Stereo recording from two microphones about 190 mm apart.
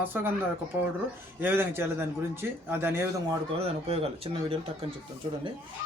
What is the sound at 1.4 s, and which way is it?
Speech, 10° right (ahead or behind).